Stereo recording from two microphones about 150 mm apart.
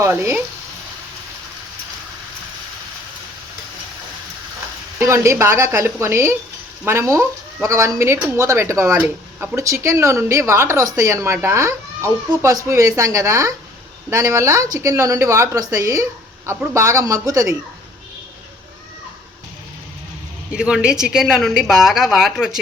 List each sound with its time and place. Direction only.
0.0 s a woman's voice: 20° right (ahead or behind)
4.9 s a woman's voice: 20° right (ahead or behind)
20.5 s a woman's voice: 5° right (ahead or behind)